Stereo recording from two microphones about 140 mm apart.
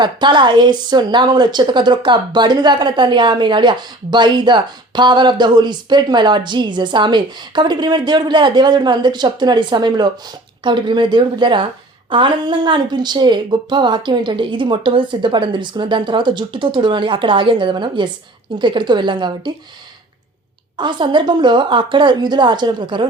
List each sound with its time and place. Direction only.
0.0 s a woman's voice: 35° right (ahead or behind)
20.7 s a woman's voice: 35° right (ahead or behind)